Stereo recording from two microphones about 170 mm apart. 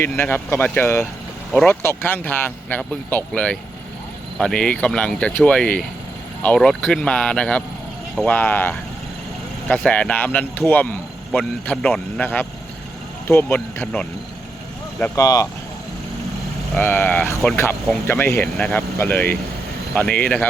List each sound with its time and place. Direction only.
0.0 s speech: 15° left (ahead or behind)
15.1 s speech: 20° left (ahead or behind)
16.7 s speech: 10° left (ahead or behind)